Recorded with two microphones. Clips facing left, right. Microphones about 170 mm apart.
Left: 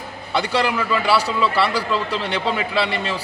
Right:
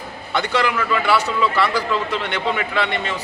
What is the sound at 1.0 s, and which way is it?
Speech, 35° left (ahead or behind).